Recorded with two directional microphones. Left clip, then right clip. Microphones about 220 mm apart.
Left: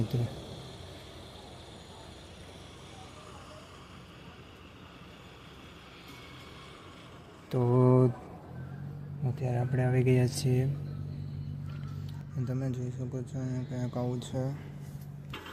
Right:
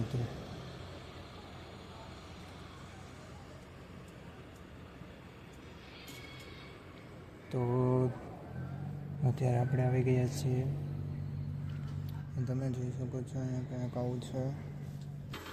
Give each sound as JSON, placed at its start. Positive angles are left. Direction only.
{"t": 0.2, "sound": "a sound", "side_deg": 50}
{"t": 7.5, "sound": "mantra", "side_deg": 20}
{"t": 9.2, "sound": "speech", "side_deg": 0}
{"t": 9.7, "sound": "speech", "side_deg": 15}
{"t": 12.0, "sound": "speech", "side_deg": 10}